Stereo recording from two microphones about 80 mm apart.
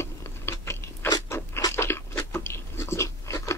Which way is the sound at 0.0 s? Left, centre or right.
Left.